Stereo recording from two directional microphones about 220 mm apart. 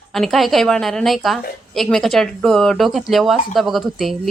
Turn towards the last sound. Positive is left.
turn(degrees=0)  # may be behind; listen again after turning